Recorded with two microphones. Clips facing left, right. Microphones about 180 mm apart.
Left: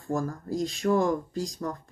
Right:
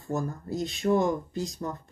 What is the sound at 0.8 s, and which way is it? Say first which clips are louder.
Speech: even; 20° right (ahead or behind).